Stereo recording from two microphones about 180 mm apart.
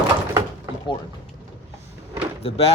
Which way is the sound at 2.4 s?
35° left (ahead or behind).